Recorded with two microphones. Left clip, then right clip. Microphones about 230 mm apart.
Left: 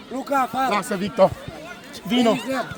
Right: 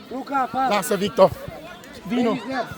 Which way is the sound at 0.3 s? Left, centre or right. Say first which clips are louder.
Left 1 dB; left.